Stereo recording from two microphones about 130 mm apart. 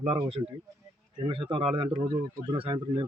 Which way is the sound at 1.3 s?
40° right (ahead or behind).